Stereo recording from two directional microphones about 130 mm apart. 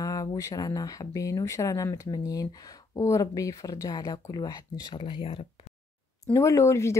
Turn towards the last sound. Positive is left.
turn(degrees=20)  # may be behind; listen again after turning